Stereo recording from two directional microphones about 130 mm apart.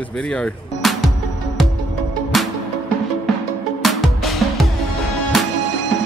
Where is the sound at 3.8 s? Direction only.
Centre (ahead or behind).